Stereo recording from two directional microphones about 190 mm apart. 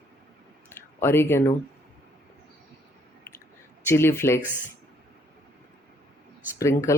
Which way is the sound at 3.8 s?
15° left (ahead or behind).